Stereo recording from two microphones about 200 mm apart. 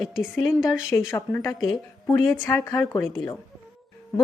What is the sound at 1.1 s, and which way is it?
A woman's voice, 15° left (ahead or behind).